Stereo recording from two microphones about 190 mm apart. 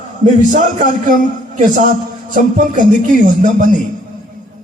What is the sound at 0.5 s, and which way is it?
Speech, 45° right (ahead or behind).